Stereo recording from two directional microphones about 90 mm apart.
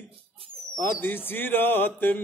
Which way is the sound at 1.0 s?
20° left (ahead or behind).